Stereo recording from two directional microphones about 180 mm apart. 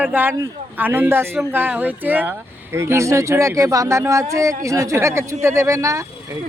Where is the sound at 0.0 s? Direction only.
10° right (ahead or behind).